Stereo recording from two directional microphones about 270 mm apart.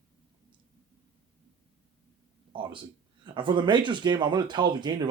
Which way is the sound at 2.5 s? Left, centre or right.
Centre.